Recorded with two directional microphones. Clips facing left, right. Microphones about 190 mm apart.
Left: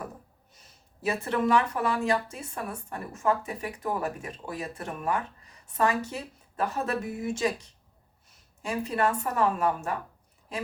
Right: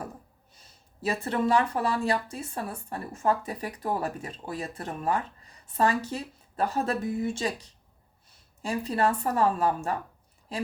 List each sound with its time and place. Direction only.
1.0 s speech: 30° right (ahead or behind)